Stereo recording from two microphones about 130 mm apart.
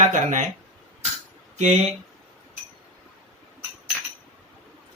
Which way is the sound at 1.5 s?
60° right (ahead or behind).